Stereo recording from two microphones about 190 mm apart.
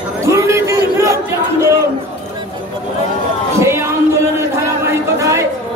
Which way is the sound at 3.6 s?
15° right (ahead or behind).